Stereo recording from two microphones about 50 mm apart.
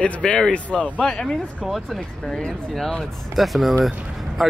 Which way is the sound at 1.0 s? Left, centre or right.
Centre.